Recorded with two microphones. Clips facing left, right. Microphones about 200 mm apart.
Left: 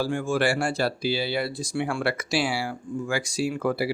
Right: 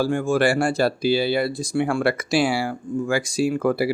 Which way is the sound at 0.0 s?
50° right (ahead or behind).